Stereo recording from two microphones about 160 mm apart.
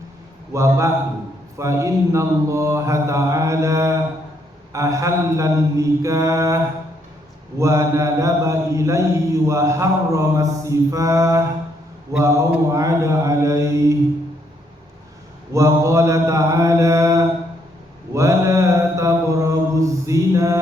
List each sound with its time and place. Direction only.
0.5 s a man's voice: 20° right (ahead or behind)
1.5 s mantra: 20° right (ahead or behind)
7.6 s mantra: 20° right (ahead or behind)
15.5 s mantra: 20° right (ahead or behind)